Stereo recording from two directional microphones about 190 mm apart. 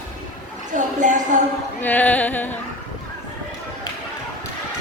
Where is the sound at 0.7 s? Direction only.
40° right (ahead or behind).